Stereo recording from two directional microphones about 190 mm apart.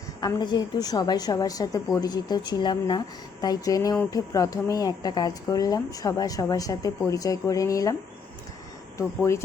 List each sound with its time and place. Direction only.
0.2 s a woman's voice: 20° left (ahead or behind)
9.0 s speech: 15° left (ahead or behind)